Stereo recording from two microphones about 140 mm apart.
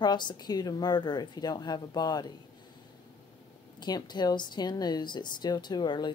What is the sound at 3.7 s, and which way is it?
Speech, 30° left (ahead or behind).